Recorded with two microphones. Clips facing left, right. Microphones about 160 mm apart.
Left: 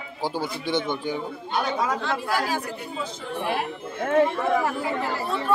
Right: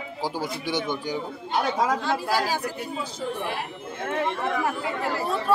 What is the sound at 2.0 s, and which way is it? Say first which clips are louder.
Speech: right 1 dB; 35° right (ahead or behind).